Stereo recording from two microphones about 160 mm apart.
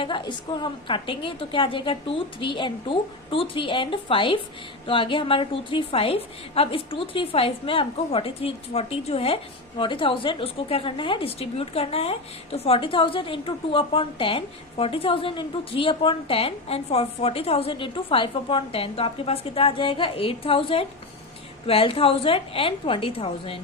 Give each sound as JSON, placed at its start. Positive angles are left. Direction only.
{"t": 0.0, "sound": "a woman's voice", "side_deg": 30}